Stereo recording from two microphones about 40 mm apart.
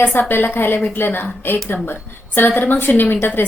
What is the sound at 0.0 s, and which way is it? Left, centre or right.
A woman's voice, left.